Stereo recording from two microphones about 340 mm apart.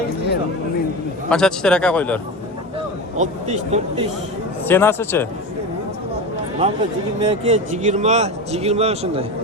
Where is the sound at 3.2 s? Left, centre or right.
Centre.